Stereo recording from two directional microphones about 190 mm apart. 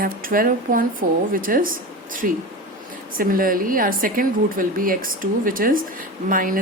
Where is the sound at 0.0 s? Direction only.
50° right (ahead or behind).